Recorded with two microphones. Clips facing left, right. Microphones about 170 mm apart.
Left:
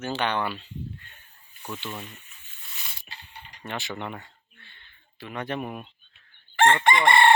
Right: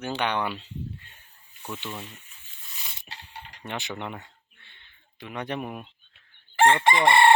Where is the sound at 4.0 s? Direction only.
15° right (ahead or behind).